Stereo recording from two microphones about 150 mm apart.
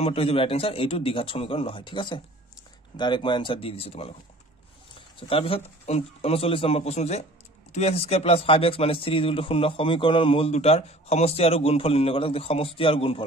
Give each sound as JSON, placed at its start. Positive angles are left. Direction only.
{"t": 0.0, "sound": "speech", "side_deg": 40}
{"t": 4.9, "sound": "a sound", "side_deg": 35}
{"t": 5.9, "sound": "speech", "side_deg": 40}